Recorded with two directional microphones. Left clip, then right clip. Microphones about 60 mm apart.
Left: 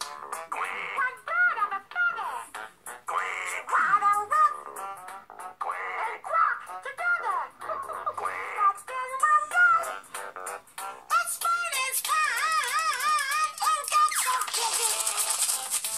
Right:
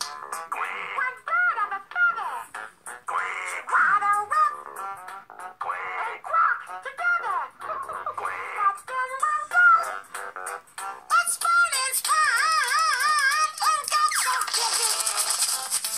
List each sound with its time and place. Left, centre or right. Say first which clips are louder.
0.0 s music: right 3 dB; right
3.1 s a sound: right 2 dB; centre
5.6 s music: right 2 dB; right
10.5 s music: right 3 dB; right